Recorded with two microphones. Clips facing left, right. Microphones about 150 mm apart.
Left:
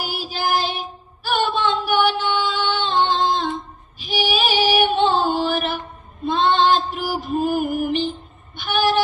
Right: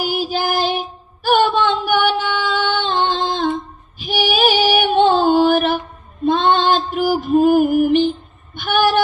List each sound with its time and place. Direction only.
0.1 s child singing: 55° right (ahead or behind)
1.2 s singing: 55° right (ahead or behind)
4.0 s music: 50° right (ahead or behind)
8.5 s a sound: 55° right (ahead or behind)